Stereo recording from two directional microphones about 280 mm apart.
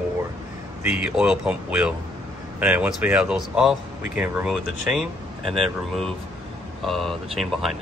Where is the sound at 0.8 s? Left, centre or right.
Centre.